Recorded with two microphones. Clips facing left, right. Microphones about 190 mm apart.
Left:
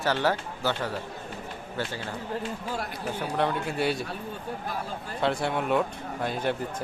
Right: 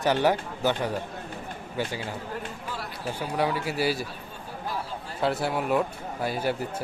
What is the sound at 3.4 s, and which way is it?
Speech, 5° right (ahead or behind).